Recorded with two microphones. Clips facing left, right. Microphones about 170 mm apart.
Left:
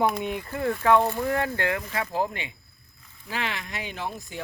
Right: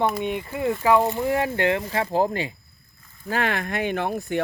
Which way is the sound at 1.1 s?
15° right (ahead or behind).